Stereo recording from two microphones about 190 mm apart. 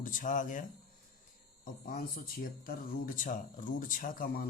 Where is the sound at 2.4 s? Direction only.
50° left (ahead or behind).